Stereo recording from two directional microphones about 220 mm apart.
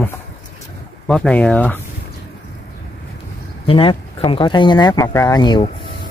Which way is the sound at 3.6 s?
25° left (ahead or behind).